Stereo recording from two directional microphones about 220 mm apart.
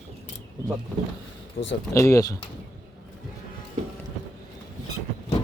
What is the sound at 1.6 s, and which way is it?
Speech, 45° left (ahead or behind).